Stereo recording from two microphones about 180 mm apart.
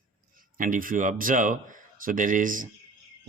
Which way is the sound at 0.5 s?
50° right (ahead or behind).